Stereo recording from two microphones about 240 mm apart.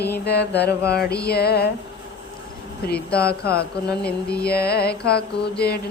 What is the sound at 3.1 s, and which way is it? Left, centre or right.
Mantra, left.